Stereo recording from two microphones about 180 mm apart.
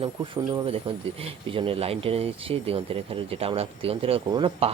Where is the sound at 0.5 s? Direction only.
30° right (ahead or behind).